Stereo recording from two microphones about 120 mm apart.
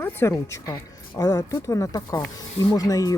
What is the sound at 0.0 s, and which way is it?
Speech, 20° left (ahead or behind).